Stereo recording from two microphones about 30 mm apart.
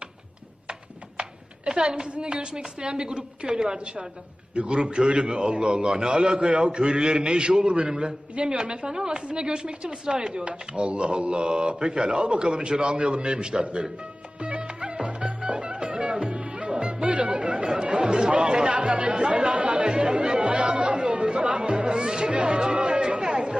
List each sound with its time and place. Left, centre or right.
1.1 s a sound: right
2.2 s a man's voice: right
14.4 s music: right
17.7 s chatter: right
18.7 s chatter: right
19.9 s chatter: right
21.8 s music: right
22.3 s chatter: right